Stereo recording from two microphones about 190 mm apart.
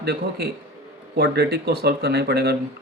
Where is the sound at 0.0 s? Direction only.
60° right (ahead or behind).